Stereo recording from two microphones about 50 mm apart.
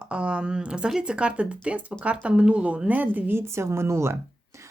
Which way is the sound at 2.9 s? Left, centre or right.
Right.